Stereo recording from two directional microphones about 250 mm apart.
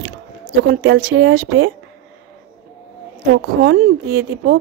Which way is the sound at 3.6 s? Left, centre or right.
Right.